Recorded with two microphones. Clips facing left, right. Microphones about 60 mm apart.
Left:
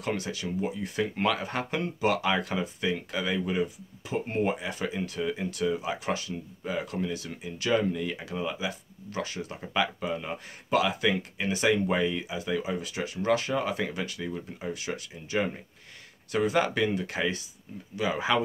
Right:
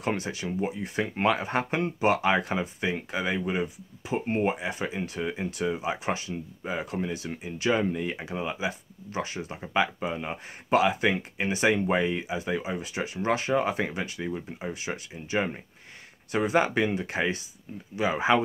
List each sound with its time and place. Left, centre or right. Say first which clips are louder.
0.0 s speech: right 2 dB; right